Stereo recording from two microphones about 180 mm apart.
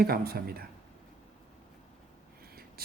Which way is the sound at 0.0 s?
55° right (ahead or behind).